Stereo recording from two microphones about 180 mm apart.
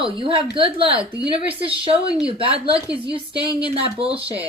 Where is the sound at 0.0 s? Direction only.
30° right (ahead or behind).